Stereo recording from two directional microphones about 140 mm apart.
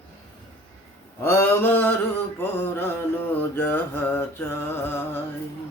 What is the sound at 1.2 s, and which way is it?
Mantra, 15° left (ahead or behind).